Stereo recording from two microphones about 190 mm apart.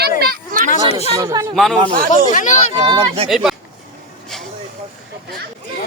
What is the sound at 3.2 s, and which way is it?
Speech, centre (ahead or behind).